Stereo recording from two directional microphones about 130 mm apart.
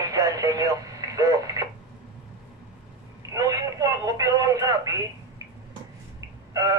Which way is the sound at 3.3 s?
30° right (ahead or behind).